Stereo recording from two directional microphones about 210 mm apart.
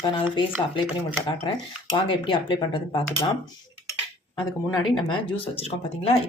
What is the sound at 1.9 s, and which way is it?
A woman's voice, 25° left (ahead or behind).